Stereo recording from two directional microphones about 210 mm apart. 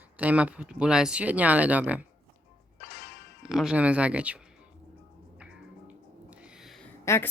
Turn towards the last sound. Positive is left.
turn(degrees=10)  # may be behind; listen again after turning